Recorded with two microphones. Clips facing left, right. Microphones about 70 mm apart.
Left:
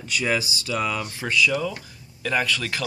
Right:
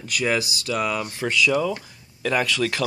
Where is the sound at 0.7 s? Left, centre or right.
Centre.